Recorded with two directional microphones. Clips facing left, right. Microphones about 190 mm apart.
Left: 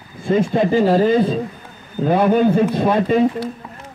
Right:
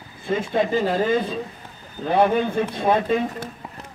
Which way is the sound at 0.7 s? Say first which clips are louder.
Left 8 dB; 40° left (ahead or behind).